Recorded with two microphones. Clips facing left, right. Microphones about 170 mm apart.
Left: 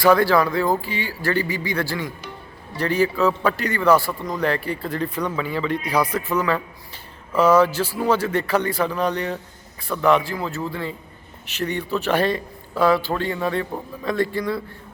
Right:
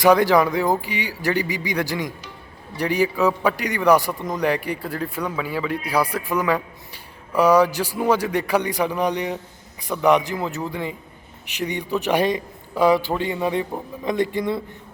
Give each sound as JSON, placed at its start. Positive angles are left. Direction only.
{"t": 0.0, "sound": "a man's voice", "side_deg": -15}